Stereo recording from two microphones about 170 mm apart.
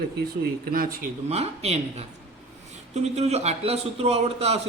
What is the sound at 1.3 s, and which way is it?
A man's voice, 40° right (ahead or behind).